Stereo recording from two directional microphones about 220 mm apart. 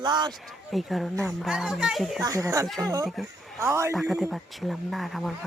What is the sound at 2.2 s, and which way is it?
Speech, 15° right (ahead or behind).